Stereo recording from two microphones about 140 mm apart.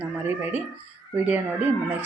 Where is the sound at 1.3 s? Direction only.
10° right (ahead or behind).